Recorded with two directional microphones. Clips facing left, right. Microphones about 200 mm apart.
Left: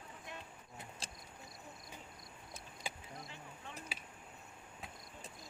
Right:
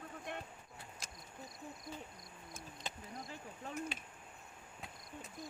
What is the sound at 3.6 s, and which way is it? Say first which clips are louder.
Speech: right 8 dB; 40° right (ahead or behind).